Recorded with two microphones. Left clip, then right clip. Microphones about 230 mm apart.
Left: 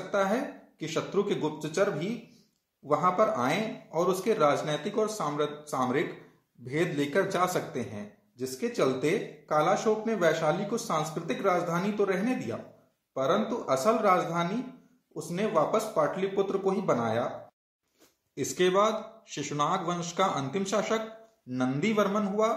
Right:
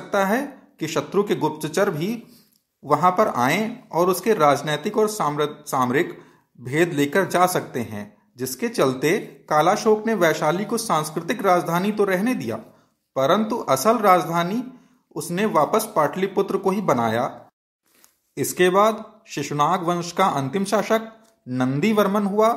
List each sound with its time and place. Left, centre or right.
0.1 s a man's voice: right
18.3 s a man's voice: right